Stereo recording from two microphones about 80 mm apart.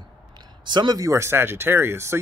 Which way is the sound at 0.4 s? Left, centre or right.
Right.